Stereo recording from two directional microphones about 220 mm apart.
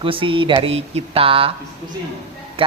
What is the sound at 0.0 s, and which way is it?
Speech, 25° right (ahead or behind).